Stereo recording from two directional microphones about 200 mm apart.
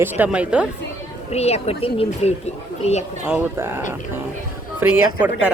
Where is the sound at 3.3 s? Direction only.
10° right (ahead or behind).